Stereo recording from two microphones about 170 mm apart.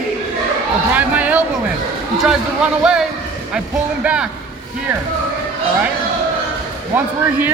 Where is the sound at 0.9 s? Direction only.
10° right (ahead or behind).